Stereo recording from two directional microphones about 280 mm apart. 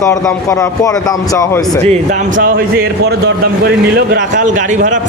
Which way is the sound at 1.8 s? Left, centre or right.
Right.